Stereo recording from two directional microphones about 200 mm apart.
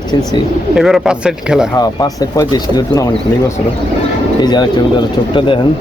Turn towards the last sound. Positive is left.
turn(degrees=20)  # may be behind; listen again after turning